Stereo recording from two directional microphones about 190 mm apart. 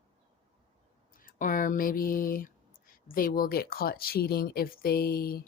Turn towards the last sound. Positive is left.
turn(degrees=55)  # may be behind; listen again after turning